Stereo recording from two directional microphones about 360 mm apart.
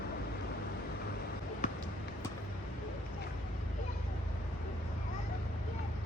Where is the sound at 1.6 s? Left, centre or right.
Centre.